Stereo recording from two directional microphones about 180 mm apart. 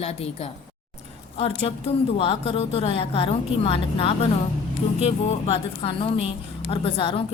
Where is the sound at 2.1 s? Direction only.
30° left (ahead or behind).